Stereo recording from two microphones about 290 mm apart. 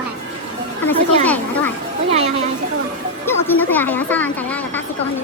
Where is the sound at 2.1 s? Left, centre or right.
Right.